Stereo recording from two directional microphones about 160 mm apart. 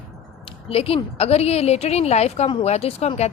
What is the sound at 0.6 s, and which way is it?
A woman's voice, 35° left (ahead or behind).